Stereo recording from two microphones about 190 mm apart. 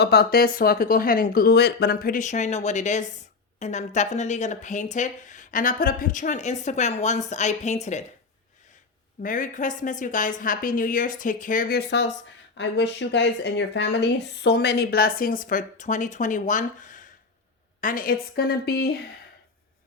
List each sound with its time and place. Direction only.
0.0 s speech: 60° left (ahead or behind); by 8.0 s 35° left (ahead or behind)
9.2 s speech: 45° left (ahead or behind)